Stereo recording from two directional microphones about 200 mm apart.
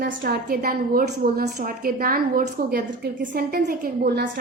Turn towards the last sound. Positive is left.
turn(degrees=-50)  # may be behind; listen again after turning